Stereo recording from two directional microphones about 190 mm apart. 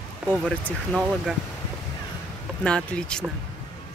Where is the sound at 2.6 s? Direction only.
5° left (ahead or behind).